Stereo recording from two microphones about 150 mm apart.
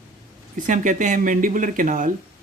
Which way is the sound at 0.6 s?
60° right (ahead or behind).